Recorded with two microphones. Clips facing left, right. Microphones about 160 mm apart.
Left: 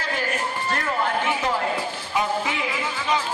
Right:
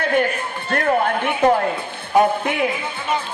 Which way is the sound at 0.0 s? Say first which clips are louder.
Right 7 dB; 60° right (ahead or behind).